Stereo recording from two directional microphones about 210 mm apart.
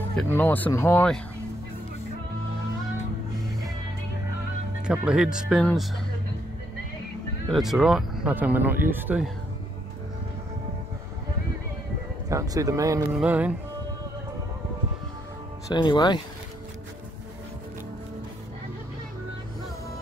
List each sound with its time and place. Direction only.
0.1 s speech: 5° left (ahead or behind)
4.8 s speech: 5° right (ahead or behind)
7.4 s speech: centre (ahead or behind)
12.3 s speech: 15° right (ahead or behind)
15.7 s speech: 20° left (ahead or behind)